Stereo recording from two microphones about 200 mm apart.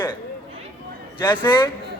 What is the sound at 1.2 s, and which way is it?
Speech, 25° left (ahead or behind).